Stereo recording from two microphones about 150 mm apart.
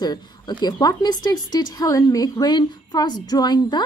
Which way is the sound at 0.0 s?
30° left (ahead or behind).